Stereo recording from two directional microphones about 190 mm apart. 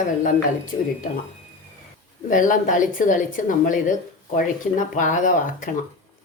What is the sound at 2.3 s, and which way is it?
Speech, 45° left (ahead or behind).